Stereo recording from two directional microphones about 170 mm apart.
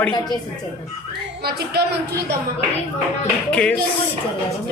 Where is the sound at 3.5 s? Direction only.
5° left (ahead or behind).